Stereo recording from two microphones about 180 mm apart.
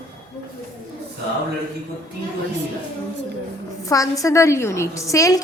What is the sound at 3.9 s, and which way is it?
A woman's voice, 20° left (ahead or behind).